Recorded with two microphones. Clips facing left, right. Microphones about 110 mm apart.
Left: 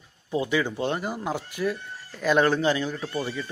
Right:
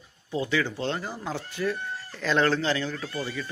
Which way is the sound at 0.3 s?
20° left (ahead or behind).